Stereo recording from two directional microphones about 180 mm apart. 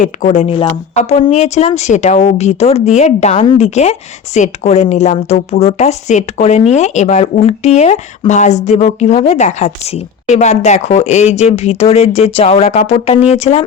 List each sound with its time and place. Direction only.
0.0 s speech: 45° left (ahead or behind)